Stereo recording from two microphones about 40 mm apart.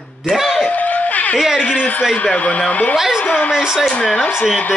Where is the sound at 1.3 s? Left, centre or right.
Centre.